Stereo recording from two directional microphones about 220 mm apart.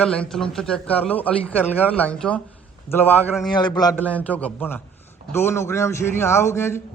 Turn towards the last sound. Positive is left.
turn(degrees=10)  # may be behind; listen again after turning